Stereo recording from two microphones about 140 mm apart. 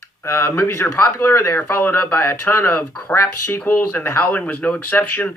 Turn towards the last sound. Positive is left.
turn(degrees=10)  # may be behind; listen again after turning